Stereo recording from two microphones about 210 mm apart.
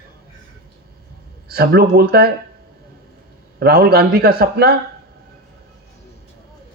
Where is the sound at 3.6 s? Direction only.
50° right (ahead or behind).